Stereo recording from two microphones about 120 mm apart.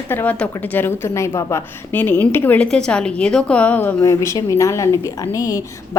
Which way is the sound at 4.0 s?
25° left (ahead or behind).